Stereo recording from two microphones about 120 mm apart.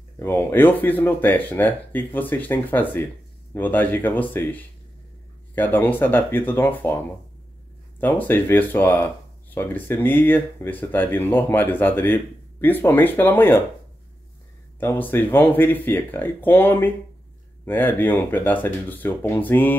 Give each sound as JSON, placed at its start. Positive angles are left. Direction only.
{"t": 0.2, "sound": "speech", "side_deg": 20}
{"t": 8.0, "sound": "speech", "side_deg": 15}
{"t": 14.8, "sound": "speech", "side_deg": 15}